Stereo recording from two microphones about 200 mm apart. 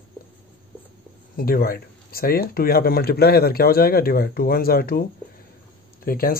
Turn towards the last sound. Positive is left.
turn(degrees=45)  # may be behind; listen again after turning